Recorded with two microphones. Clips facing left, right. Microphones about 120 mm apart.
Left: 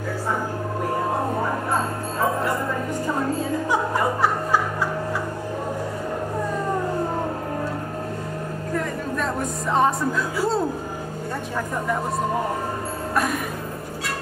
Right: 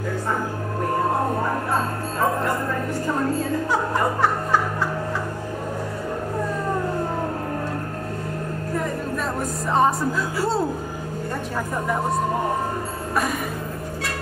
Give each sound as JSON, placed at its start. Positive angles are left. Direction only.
{"t": 3.7, "sound": "music", "side_deg": 10}
{"t": 9.7, "sound": "speech", "side_deg": 0}
{"t": 13.1, "sound": "music", "side_deg": 0}